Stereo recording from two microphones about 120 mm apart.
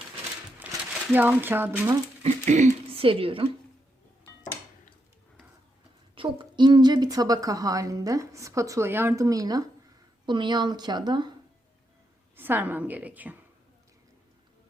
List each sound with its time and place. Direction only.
0.7 s a sound: 10° right (ahead or behind)
1.1 s a woman's voice: 15° right (ahead or behind)
2.2 s a sound: 90° right
2.9 s a woman's voice: 50° right (ahead or behind)
6.1 s a woman's voice: 45° right (ahead or behind); by 9.2 s 20° right (ahead or behind)
9.2 s a woman's voice: 30° right (ahead or behind)
12.4 s a woman's voice: 15° right (ahead or behind)